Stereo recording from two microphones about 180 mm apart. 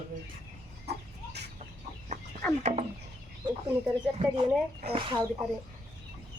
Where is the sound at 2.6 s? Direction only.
40° right (ahead or behind).